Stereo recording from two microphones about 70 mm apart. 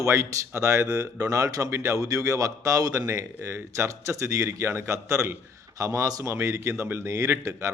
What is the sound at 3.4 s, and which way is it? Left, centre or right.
A man's voice, right.